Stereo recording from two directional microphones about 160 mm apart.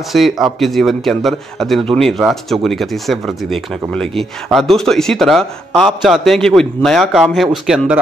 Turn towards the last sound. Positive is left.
turn(degrees=-5)  # may be behind; listen again after turning